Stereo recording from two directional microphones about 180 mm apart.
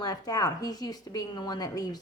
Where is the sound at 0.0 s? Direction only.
20° left (ahead or behind).